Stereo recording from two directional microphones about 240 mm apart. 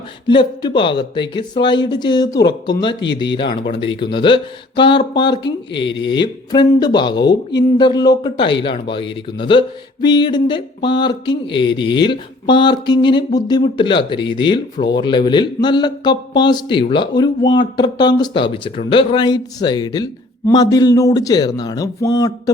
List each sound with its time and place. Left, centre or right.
0.3 s speech: centre